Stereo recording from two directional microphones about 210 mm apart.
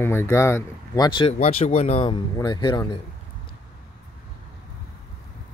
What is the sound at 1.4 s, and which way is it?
Speech, 35° left (ahead or behind).